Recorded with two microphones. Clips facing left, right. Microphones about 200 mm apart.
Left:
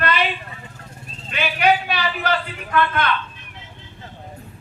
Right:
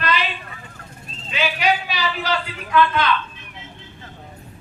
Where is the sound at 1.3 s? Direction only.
55° left (ahead or behind).